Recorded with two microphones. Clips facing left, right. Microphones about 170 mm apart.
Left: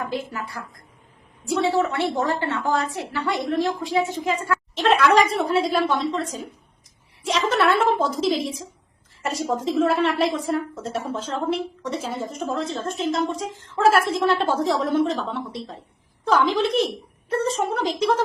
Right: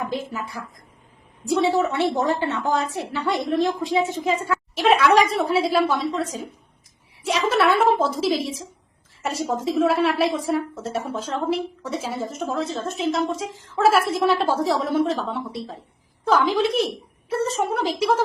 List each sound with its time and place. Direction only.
0.3 s a woman's voice: 20° right (ahead or behind)
4.7 s speech: 10° right (ahead or behind)
7.4 s a woman's voice: 10° right (ahead or behind)